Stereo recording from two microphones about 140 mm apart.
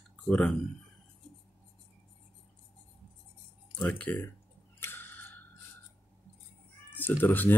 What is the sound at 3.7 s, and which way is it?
Speech, 10° left (ahead or behind).